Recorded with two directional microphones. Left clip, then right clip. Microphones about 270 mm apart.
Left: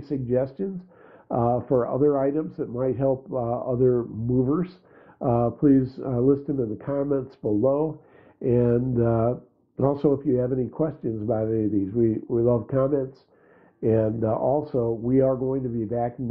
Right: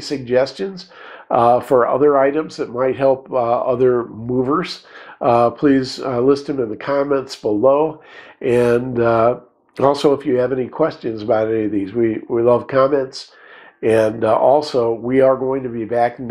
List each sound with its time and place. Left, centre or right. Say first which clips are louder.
0.0 s speech: right 8 dB; centre
7.4 s speech: right 8 dB; right
8.4 s speech: right 7 dB; centre